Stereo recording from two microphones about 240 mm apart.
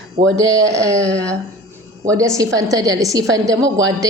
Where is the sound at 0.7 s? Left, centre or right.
Centre.